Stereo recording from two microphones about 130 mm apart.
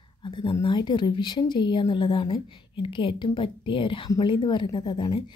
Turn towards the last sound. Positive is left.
turn(degrees=35)  # may be behind; listen again after turning